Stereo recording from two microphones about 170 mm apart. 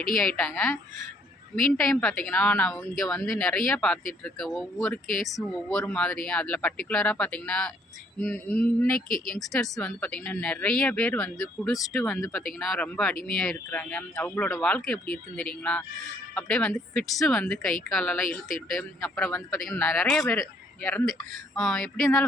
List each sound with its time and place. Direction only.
0.2 s speech: 5° left (ahead or behind)
9.0 s speech: 55° left (ahead or behind)
9.3 s speech: centre (ahead or behind)